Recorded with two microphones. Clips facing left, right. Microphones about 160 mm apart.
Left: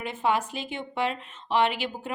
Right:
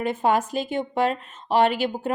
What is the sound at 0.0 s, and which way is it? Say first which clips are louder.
A woman's voice: right 5 dB; 40° right (ahead or behind).